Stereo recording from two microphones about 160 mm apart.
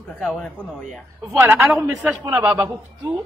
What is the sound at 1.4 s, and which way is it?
A man's voice, 15° right (ahead or behind).